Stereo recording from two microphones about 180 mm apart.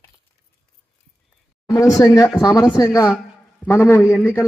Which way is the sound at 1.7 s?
15° left (ahead or behind).